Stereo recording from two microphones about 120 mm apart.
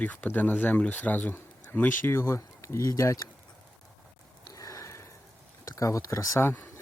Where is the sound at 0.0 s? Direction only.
15° left (ahead or behind).